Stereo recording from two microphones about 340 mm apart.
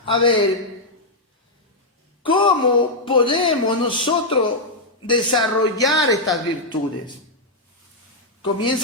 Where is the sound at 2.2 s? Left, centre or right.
Centre.